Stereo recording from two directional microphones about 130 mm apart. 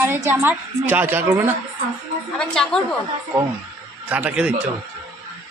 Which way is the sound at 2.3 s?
5° left (ahead or behind).